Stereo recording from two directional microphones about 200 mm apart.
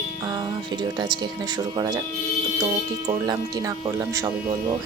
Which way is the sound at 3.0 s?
20° right (ahead or behind).